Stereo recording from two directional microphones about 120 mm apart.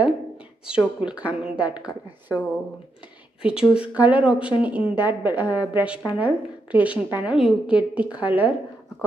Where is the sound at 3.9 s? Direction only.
10° right (ahead or behind).